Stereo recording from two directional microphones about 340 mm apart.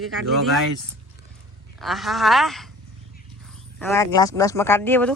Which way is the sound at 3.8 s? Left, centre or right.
Centre.